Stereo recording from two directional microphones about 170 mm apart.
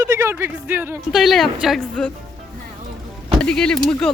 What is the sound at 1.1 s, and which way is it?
Speech, centre (ahead or behind).